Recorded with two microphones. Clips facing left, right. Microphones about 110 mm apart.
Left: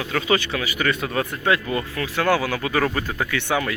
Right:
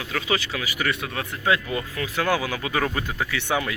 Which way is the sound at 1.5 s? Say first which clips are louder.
Even; 15° right (ahead or behind).